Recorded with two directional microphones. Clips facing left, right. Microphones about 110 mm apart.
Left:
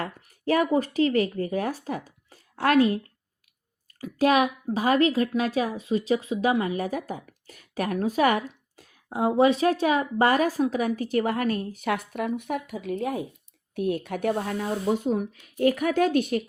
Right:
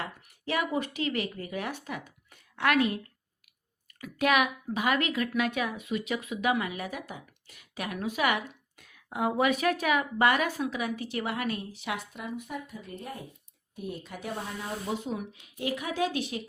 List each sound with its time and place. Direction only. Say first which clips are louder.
0.0 s a woman's voice: left 7 dB; 45° left (ahead or behind); by 13.2 s 90° left
13.7 s speech: left 11 dB; 70° left (ahead or behind); by 16.4 s 50° left (ahead or behind)